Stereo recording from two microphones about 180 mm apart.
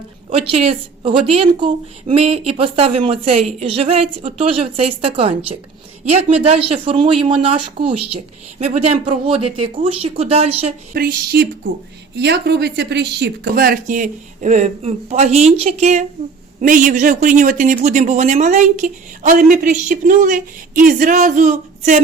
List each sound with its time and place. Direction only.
0.3 s a woman's voice: 35° right (ahead or behind)
10.9 s a woman's voice: 60° right (ahead or behind); by 22.0 s 45° right (ahead or behind)